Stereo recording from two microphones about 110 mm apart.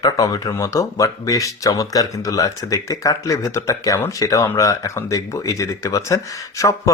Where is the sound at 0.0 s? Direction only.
35° left (ahead or behind).